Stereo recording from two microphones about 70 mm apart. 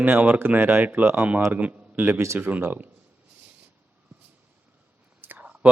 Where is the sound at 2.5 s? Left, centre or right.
Right.